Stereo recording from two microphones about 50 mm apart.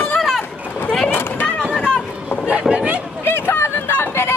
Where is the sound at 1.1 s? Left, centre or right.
Left.